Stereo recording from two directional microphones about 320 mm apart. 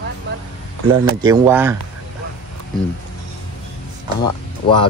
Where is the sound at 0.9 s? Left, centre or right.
Centre.